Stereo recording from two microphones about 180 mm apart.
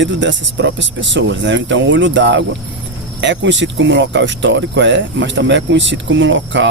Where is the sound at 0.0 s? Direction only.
90° right.